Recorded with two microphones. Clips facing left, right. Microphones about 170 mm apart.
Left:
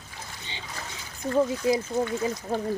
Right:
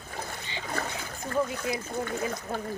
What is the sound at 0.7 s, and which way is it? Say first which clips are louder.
Splash: right 9 dB; 55° right (ahead or behind).